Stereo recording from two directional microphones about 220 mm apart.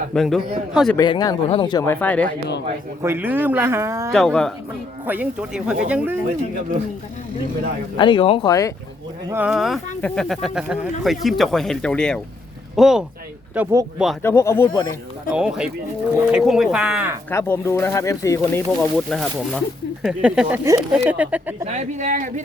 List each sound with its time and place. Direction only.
0.1 s speech: centre (ahead or behind)
0.9 s speech: 20° left (ahead or behind)
3.0 s speech: 10° right (ahead or behind)
4.1 s speech: 5° left (ahead or behind)
7.9 s speech: 20° left (ahead or behind)
9.3 s speech: 5° right (ahead or behind)
14.2 s speech: 10° left (ahead or behind)
15.3 s speech: 5° right (ahead or behind)
17.3 s speech: 10° left (ahead or behind)
18.7 s speech: centre (ahead or behind)
21.7 s speech: 30° right (ahead or behind)